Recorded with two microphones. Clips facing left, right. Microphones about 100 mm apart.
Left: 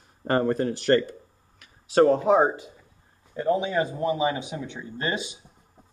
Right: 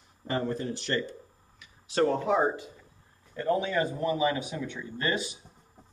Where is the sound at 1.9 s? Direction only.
35° left (ahead or behind).